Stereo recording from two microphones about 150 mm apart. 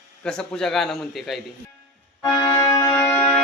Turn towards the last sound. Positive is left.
turn(degrees=15)  # may be behind; listen again after turning